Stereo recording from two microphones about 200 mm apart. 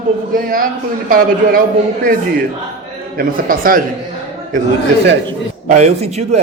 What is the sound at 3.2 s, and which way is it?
Speech, 45° right (ahead or behind).